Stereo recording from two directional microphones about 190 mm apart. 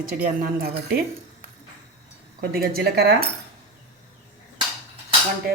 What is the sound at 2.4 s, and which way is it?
Speech, 55° right (ahead or behind).